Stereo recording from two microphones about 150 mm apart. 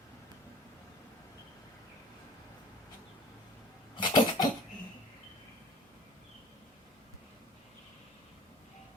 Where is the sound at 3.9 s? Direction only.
30° left (ahead or behind).